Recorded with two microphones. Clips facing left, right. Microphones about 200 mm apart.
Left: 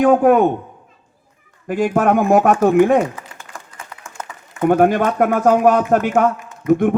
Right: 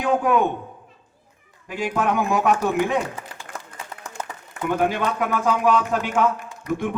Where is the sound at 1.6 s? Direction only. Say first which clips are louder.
Left 8 dB; 50° left (ahead or behind).